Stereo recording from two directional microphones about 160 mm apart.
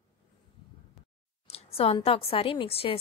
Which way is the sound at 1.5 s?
40° left (ahead or behind).